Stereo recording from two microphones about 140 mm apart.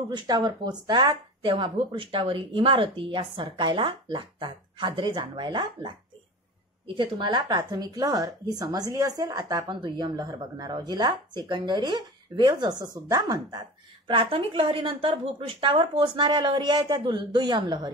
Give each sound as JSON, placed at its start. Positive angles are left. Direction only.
{"t": 0.1, "sound": "speech", "side_deg": -30}
{"t": 7.0, "sound": "speech", "side_deg": -35}
{"t": 14.0, "sound": "speech", "side_deg": -40}